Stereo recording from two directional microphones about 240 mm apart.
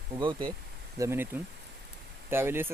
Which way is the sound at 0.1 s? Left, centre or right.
Centre.